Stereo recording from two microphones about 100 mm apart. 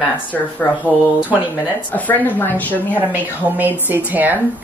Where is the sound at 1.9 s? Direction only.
15° left (ahead or behind).